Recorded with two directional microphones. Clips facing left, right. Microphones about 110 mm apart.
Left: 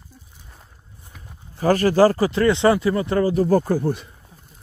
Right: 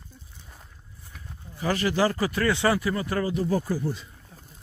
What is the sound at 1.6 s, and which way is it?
Speech, 45° left (ahead or behind).